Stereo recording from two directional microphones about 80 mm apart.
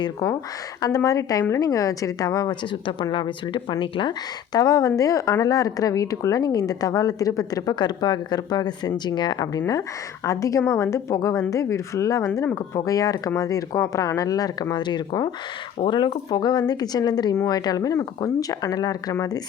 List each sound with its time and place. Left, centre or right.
0.0 s speech: left
2.5 s speech: left
4.5 s speech: left
15.8 s speech: left